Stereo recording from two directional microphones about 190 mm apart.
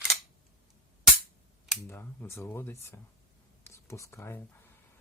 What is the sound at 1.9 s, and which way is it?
Speech, 15° left (ahead or behind).